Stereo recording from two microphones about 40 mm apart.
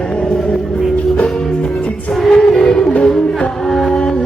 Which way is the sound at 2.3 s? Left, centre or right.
Centre.